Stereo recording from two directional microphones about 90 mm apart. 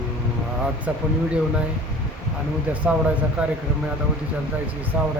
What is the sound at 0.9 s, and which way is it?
Speech, 15° right (ahead or behind).